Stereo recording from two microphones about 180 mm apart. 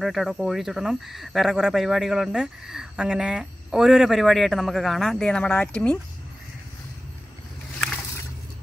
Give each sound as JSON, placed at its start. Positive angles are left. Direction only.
{"t": 0.0, "sound": "speech", "side_deg": 0}